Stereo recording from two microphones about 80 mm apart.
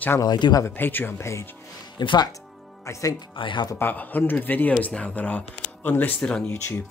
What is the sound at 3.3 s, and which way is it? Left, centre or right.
Speech, left.